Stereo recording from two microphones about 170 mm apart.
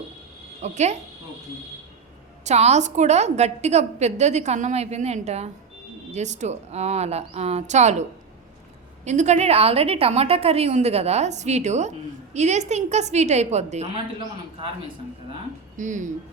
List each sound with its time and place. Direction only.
0.6 s a woman's voice: 40° right (ahead or behind)
2.4 s a woman's voice: 40° right (ahead or behind)
9.0 s a woman's voice: 45° right (ahead or behind)
15.8 s speech: 45° right (ahead or behind)